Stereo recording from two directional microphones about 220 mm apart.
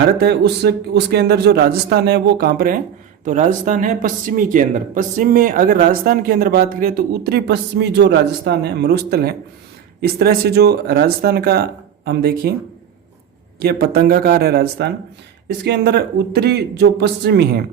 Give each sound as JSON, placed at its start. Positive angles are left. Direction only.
{"t": 0.2, "sound": "a man's voice", "side_deg": -45}
{"t": 13.6, "sound": "a man's voice", "side_deg": -45}